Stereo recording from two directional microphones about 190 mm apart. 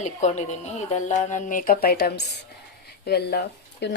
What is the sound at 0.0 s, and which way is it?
Speech, 40° left (ahead or behind).